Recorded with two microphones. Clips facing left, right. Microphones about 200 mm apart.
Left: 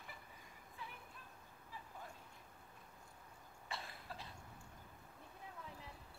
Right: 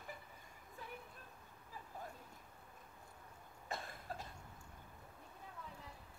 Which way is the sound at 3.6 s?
45° right (ahead or behind).